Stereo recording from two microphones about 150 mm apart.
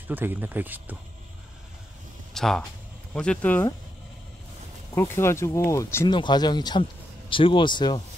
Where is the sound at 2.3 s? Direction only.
Centre (ahead or behind).